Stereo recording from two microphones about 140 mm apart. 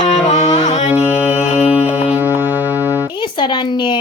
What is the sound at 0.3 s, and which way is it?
Music, 55° left (ahead or behind).